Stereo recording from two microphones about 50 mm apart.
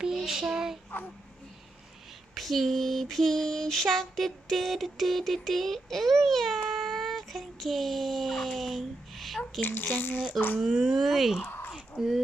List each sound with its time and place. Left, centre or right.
0.3 s child singing: centre
2.3 s mantra: centre
9.6 s speech: left
10.6 s mantra: centre
11.4 s a sound: left
11.7 s a sound: centre